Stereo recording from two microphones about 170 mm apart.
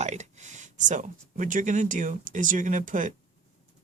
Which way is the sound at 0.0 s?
40° right (ahead or behind).